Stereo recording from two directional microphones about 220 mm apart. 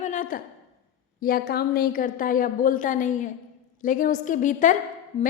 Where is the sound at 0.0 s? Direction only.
35° left (ahead or behind).